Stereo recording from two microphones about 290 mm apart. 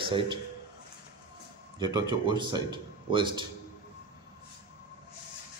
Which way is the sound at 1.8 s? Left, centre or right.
Centre.